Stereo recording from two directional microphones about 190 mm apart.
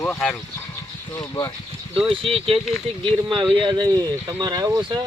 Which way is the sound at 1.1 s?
20° left (ahead or behind).